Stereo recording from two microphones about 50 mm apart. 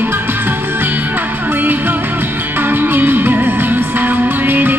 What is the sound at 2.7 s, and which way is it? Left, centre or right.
Music, right.